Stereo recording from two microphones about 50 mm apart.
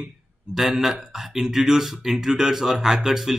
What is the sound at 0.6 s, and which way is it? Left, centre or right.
Speech, centre.